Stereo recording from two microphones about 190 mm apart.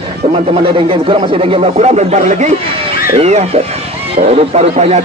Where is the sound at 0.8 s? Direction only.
25° right (ahead or behind).